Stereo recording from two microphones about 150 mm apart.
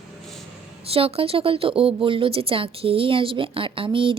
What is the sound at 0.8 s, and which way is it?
Speech, 40° right (ahead or behind).